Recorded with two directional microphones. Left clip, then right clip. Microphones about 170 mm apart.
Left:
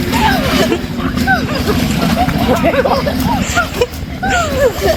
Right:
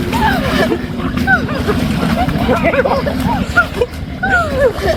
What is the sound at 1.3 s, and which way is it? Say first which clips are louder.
Speech: right 1 dB; centre (ahead or behind).